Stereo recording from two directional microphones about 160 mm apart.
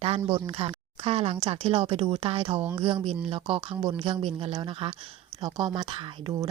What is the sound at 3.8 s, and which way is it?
Speech, 25° right (ahead or behind).